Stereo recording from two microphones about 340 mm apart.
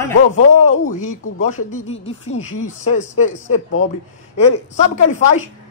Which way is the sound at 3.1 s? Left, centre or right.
Left.